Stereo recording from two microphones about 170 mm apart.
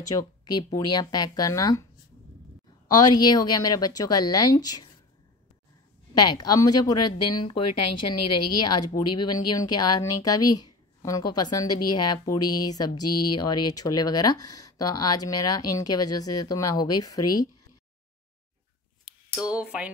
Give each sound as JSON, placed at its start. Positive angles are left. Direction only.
{"t": 0.1, "sound": "speech", "side_deg": 25}
{"t": 2.9, "sound": "speech", "side_deg": 25}
{"t": 6.3, "sound": "speech", "side_deg": 20}
{"t": 8.6, "sound": "speech", "side_deg": 25}
{"t": 19.0, "sound": "speech", "side_deg": -5}